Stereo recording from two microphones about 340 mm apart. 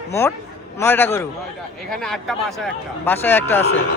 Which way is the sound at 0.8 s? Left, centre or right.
Centre.